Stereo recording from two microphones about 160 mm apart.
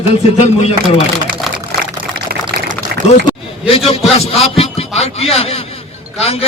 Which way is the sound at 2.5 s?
80° right.